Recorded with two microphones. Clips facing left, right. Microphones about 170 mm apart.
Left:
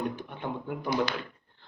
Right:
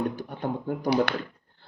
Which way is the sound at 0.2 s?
40° right (ahead or behind).